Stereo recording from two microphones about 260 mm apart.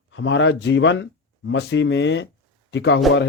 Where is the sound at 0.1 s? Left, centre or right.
Left.